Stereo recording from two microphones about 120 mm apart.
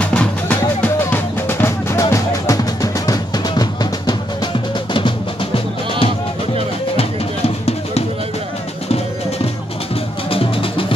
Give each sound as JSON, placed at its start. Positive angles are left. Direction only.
{"t": 0.0, "sound": "music", "side_deg": 10}
{"t": 4.9, "sound": "drum", "side_deg": 45}
{"t": 7.0, "sound": "music", "side_deg": 55}
{"t": 10.3, "sound": "music", "side_deg": 50}